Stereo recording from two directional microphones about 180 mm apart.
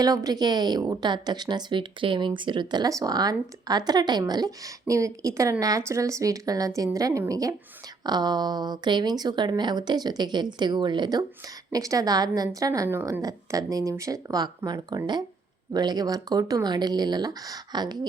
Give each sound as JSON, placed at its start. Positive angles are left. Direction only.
{"t": 0.0, "sound": "a woman's voice", "side_deg": -20}